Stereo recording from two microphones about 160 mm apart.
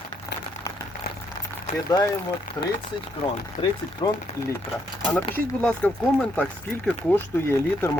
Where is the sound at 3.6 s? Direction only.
30° left (ahead or behind).